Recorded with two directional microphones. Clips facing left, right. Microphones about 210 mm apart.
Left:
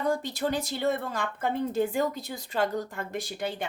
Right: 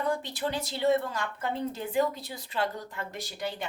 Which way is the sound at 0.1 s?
45° left (ahead or behind).